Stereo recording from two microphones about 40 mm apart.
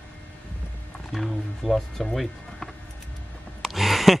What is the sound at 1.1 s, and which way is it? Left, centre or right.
Speech, centre.